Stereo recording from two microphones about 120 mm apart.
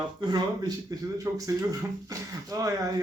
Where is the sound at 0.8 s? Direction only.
25° right (ahead or behind).